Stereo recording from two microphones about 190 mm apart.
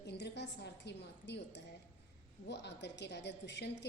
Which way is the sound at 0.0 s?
65° left (ahead or behind).